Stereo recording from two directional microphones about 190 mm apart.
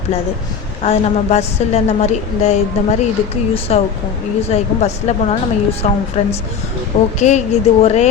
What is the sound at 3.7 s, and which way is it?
A woman's voice, 35° left (ahead or behind).